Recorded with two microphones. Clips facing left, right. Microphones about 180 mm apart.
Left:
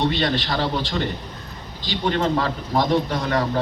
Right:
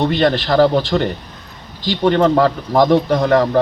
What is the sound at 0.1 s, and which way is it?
Speech, 50° right (ahead or behind).